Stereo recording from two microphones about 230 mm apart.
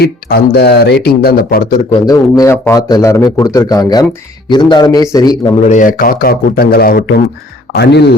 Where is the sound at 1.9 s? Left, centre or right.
Centre.